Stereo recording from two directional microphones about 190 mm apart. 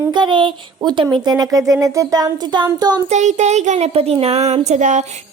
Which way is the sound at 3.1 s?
40° right (ahead or behind).